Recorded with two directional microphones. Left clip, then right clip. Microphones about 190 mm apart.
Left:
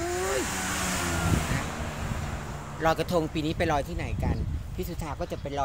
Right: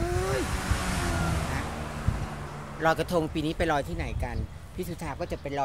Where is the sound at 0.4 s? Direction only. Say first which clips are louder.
Left 2 dB; 55° left (ahead or behind).